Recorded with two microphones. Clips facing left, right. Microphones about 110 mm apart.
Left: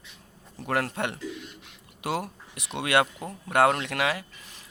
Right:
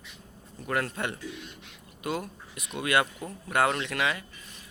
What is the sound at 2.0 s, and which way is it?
Speech, 75° left (ahead or behind).